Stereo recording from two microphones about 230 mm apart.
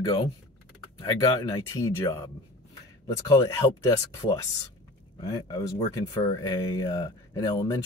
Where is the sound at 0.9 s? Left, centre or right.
Centre.